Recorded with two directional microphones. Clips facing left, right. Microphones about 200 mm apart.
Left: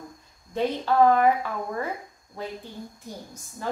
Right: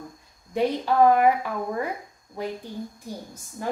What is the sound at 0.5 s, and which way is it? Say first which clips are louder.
A woman's voice: right 2 dB; 15° right (ahead or behind).